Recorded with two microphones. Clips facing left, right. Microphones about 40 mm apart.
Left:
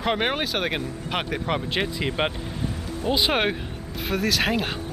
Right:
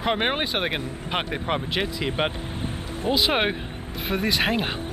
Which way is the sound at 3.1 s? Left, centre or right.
Centre.